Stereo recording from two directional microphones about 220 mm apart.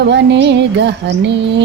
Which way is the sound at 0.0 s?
50° right (ahead or behind).